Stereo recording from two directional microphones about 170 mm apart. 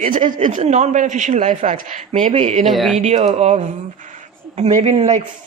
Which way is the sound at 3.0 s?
40° right (ahead or behind).